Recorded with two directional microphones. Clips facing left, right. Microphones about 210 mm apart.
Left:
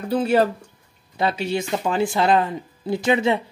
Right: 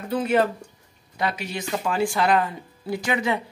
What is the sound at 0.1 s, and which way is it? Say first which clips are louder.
Speech: left 3 dB; 30° left (ahead or behind).